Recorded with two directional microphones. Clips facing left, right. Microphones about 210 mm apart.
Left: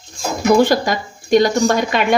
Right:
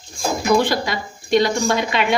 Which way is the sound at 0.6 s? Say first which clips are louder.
Left 6 dB; 45° left (ahead or behind).